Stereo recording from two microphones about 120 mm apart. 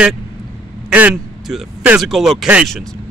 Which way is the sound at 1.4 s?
5° right (ahead or behind).